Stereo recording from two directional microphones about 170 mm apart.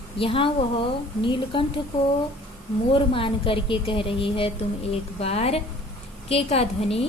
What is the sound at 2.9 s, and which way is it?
A woman's voice, 30° left (ahead or behind).